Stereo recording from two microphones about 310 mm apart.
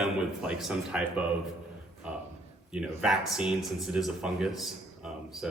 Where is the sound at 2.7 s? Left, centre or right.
Centre.